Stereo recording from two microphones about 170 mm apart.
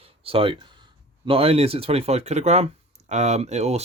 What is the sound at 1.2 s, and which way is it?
Speech, 35° right (ahead or behind).